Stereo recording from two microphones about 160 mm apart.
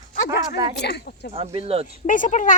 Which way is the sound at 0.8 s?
90° left.